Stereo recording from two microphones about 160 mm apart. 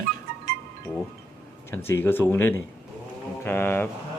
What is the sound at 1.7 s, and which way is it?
Speech, 15° left (ahead or behind).